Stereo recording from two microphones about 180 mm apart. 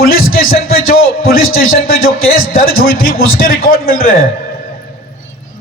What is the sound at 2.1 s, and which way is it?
Speech, 90° left.